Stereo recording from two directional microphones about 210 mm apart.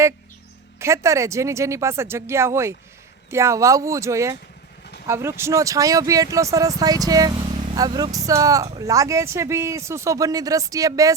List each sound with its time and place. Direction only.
0.8 s speech: 15° right (ahead or behind)